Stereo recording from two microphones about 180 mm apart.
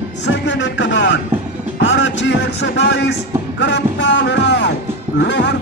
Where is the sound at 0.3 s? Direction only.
85° left.